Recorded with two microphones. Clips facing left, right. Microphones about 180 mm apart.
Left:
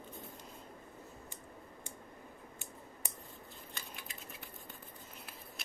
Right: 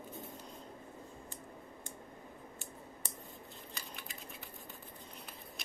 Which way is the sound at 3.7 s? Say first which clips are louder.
Even; centre (ahead or behind).